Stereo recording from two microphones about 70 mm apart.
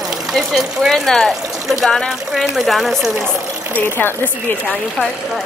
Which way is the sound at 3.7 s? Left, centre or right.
Left.